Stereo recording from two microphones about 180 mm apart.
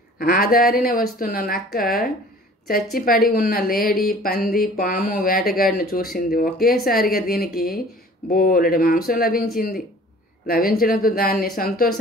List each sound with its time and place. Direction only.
0.2 s a woman's voice: 55° left (ahead or behind)